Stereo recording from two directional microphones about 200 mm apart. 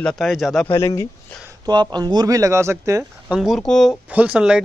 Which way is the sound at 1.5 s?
20° right (ahead or behind).